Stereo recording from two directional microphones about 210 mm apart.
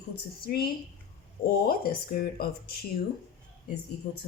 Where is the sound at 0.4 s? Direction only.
45° left (ahead or behind).